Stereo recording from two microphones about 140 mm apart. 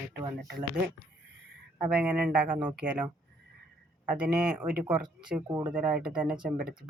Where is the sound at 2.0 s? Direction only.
10° right (ahead or behind).